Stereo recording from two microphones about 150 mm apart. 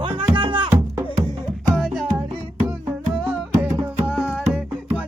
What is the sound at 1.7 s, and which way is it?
Music, centre (ahead or behind).